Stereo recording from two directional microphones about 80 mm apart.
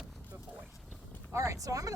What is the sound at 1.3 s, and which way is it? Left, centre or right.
Speech, right.